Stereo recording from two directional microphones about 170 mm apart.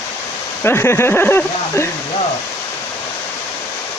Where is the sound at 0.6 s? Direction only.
15° left (ahead or behind).